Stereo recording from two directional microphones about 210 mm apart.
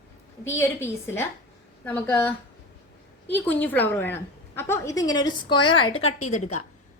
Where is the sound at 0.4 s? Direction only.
10° left (ahead or behind).